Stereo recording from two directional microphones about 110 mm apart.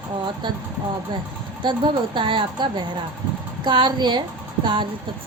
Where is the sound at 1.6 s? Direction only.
45° right (ahead or behind).